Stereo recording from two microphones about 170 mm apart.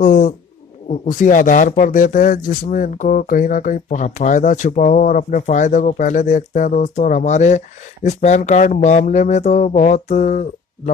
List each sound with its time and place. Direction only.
0.0 s speech: 50° left (ahead or behind)